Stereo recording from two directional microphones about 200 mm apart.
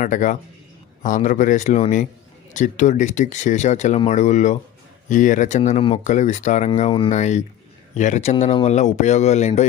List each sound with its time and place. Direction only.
0.0 s speech: 40° left (ahead or behind)